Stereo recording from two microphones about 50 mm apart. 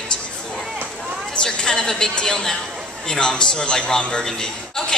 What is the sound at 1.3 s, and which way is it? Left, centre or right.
A woman's voice, centre.